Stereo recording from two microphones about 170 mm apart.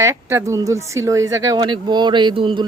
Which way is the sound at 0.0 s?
15° right (ahead or behind).